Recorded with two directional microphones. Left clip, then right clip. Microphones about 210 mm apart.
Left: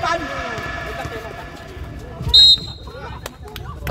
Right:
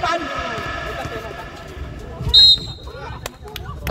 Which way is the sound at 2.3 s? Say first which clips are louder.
Even; 20° left (ahead or behind).